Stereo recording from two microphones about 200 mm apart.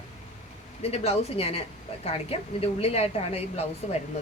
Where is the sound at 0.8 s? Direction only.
30° left (ahead or behind).